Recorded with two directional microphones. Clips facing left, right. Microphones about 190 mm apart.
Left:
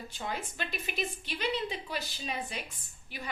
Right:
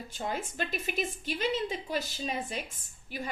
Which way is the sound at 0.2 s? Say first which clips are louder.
Right 4 dB; 45° right (ahead or behind).